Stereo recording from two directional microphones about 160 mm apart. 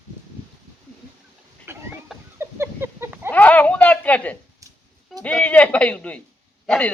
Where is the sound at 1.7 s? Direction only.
15° right (ahead or behind).